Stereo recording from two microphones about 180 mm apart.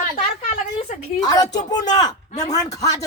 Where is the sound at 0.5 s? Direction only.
35° left (ahead or behind).